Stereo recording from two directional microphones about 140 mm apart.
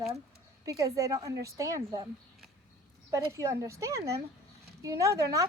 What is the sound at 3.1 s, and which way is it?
A woman's voice, 20° right (ahead or behind).